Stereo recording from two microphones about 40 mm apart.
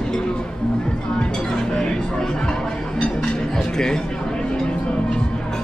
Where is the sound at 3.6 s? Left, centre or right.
Centre.